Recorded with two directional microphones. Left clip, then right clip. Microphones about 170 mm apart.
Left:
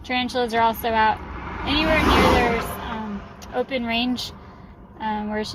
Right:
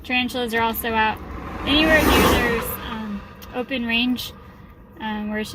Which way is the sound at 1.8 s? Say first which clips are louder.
Right 1 dB; 55° right (ahead or behind).